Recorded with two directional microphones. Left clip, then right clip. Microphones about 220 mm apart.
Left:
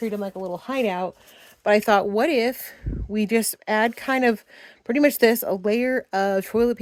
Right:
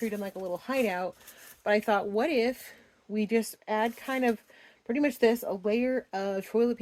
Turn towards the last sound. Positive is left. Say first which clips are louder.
# left 7 dB
turn(degrees=40)  # may be behind; listen again after turning